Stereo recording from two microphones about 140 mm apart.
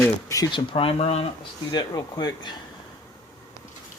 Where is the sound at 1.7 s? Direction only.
30° left (ahead or behind).